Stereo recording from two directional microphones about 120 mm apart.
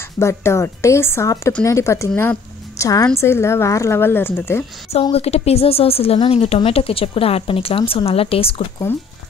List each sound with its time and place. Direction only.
0.2 s a woman's voice: 20° left (ahead or behind)
5.1 s speech: 60° left (ahead or behind)